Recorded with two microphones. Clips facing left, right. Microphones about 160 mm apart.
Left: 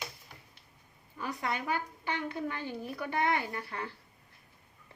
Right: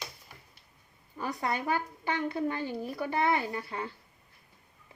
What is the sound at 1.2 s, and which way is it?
Speech, 35° right (ahead or behind).